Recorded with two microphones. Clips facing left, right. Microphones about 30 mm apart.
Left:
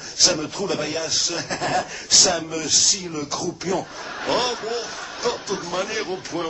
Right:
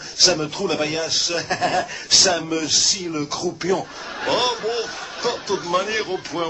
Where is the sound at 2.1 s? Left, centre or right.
Right.